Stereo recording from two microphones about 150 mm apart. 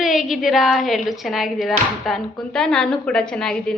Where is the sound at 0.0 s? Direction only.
Centre (ahead or behind).